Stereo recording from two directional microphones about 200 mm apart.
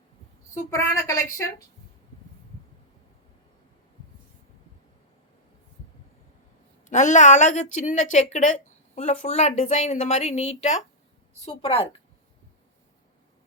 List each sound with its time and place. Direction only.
0.7 s a woman's voice: 15° left (ahead or behind)
6.8 s a woman's voice: 35° left (ahead or behind)